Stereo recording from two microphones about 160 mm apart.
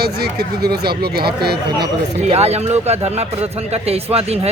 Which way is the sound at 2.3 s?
40° right (ahead or behind).